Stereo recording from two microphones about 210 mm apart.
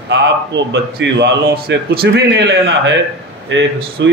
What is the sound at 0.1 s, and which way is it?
A man's voice, 60° right (ahead or behind).